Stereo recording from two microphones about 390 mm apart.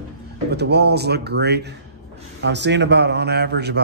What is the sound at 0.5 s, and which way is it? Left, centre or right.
Speech, right.